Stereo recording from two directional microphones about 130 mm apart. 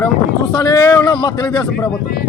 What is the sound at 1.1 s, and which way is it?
Speech, 30° left (ahead or behind).